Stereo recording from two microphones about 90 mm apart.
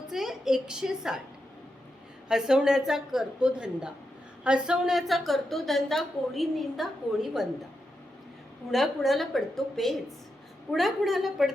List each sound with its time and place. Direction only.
0.1 s a woman's voice: 5° right (ahead or behind)
2.3 s a woman's voice: 5° right (ahead or behind)
8.7 s a woman's voice: centre (ahead or behind)